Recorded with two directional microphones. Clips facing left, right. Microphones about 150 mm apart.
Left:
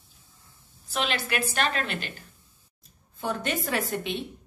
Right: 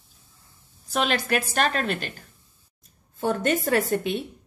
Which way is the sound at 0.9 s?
45° right (ahead or behind).